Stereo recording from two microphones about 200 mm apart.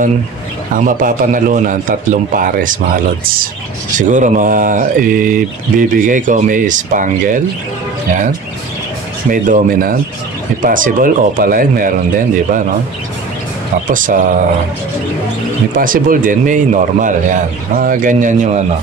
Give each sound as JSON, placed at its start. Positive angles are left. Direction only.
{"t": 0.7, "sound": "a man's voice", "side_deg": -40}
{"t": 9.3, "sound": "a man's voice", "side_deg": -45}
{"t": 13.8, "sound": "speech", "side_deg": -40}
{"t": 15.7, "sound": "speech", "side_deg": -45}